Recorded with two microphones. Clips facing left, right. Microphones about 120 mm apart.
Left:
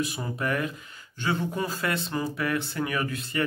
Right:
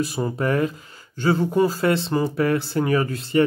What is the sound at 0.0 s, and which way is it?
Speech, 35° right (ahead or behind).